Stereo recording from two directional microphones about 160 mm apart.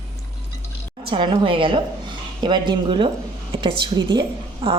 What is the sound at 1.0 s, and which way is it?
A woman's voice, 30° right (ahead or behind).